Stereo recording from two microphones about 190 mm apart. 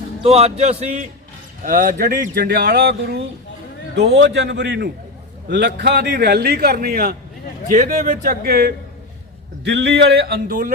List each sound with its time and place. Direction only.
0.2 s a man's voice: 35° right (ahead or behind); by 10.7 s 50° right (ahead or behind)